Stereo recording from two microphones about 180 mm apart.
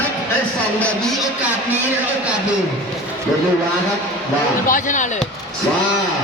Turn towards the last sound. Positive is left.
turn(degrees=45)  # may be behind; listen again after turning